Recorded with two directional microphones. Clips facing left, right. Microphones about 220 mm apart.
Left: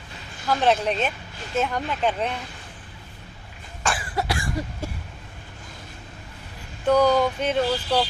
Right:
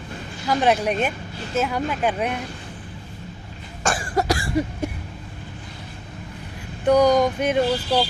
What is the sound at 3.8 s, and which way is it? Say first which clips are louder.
Cough: right 4 dB; 45° right (ahead or behind).